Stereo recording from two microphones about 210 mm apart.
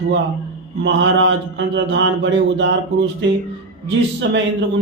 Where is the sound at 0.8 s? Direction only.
60° right (ahead or behind).